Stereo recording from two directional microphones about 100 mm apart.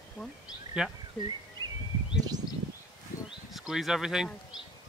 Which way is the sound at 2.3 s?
40° right (ahead or behind).